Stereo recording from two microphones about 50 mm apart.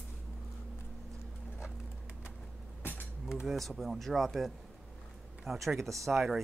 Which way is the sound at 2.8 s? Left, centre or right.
Left.